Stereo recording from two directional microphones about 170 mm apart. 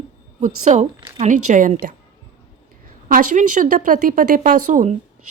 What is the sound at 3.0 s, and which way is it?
A woman's voice, 50° right (ahead or behind).